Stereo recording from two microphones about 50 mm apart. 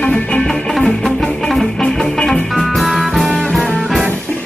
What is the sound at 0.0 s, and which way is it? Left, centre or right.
Music, centre.